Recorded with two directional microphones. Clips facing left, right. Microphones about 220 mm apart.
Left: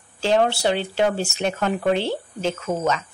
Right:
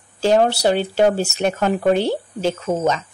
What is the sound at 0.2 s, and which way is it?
A woman's voice, 40° right (ahead or behind).